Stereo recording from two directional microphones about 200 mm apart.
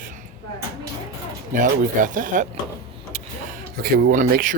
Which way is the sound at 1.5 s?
40° right (ahead or behind).